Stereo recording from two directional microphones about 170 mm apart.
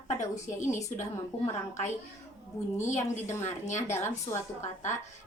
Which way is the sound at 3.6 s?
45° left (ahead or behind).